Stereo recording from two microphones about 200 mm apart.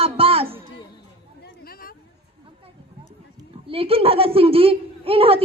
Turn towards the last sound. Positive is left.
turn(degrees=-30)  # may be behind; listen again after turning